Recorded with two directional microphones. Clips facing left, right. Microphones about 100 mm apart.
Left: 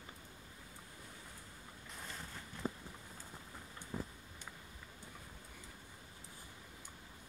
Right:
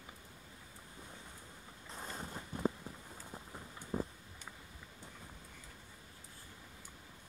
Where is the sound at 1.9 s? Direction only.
35° right (ahead or behind).